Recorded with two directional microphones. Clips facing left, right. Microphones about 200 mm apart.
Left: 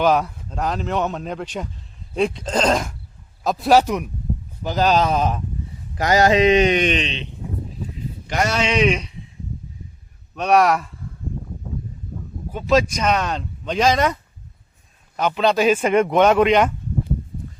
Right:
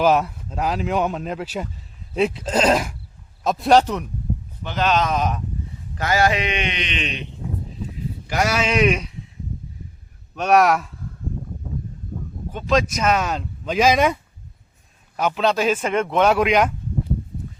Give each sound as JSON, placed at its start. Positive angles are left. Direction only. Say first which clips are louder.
{"t": 0.0, "sound": "speech", "louder": "even", "side_deg": 0}
{"t": 4.6, "sound": "speech", "louder": "left 3 dB", "side_deg": 35}
{"t": 6.0, "sound": "a sound", "louder": "left 4 dB", "side_deg": 20}
{"t": 6.4, "sound": "speech", "louder": "left 11 dB", "side_deg": 40}
{"t": 7.0, "sound": "a sound", "louder": "left 1 dB", "side_deg": 25}
{"t": 8.3, "sound": "speech", "louder": "even", "side_deg": -5}
{"t": 10.3, "sound": "speech", "louder": "even", "side_deg": 0}
{"t": 12.5, "sound": "speech", "louder": "left 2 dB", "side_deg": 5}
{"t": 12.9, "sound": "speech", "louder": "even", "side_deg": -5}
{"t": 16.1, "sound": "speech", "louder": "left 1 dB", "side_deg": -5}